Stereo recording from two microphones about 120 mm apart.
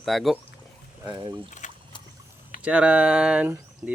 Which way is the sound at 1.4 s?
90° left.